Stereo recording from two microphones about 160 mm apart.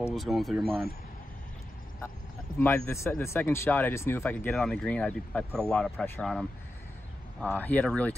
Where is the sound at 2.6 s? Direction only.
15° left (ahead or behind).